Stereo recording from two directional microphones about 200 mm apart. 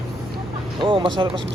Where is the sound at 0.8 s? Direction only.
25° right (ahead or behind).